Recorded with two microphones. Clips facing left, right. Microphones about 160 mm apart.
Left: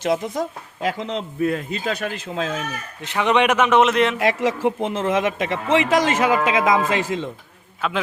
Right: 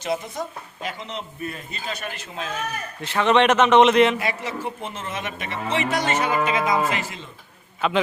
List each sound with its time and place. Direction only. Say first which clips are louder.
0.0 s speech: left 5 dB; 90° left
3.0 s a man's voice: even; 15° left (ahead or behind); by 4.2 s centre (ahead or behind)
4.2 s speech: left 8 dB; 90° left
7.8 s a man's voice: right 3 dB; centre (ahead or behind)